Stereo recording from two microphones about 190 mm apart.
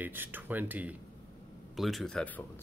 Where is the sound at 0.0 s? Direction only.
10° right (ahead or behind).